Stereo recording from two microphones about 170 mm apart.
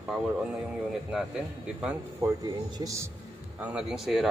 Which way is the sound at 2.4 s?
20° right (ahead or behind).